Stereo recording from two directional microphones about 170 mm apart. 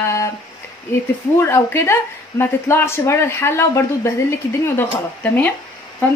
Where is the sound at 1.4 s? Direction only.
15° left (ahead or behind).